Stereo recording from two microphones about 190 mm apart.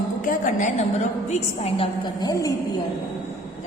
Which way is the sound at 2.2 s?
20° left (ahead or behind).